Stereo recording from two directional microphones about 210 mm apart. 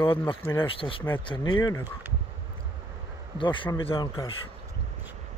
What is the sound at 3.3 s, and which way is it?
Speech, 25° left (ahead or behind).